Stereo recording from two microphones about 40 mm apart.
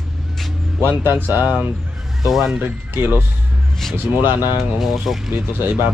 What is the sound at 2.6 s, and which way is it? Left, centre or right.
Speech, right.